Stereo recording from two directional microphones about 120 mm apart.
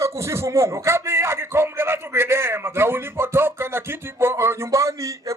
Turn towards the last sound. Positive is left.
turn(degrees=-25)  # may be behind; listen again after turning